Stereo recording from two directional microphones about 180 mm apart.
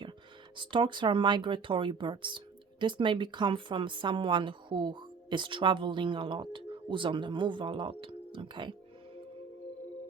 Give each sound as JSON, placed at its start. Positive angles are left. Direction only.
{"t": 0.5, "sound": "speech", "side_deg": -25}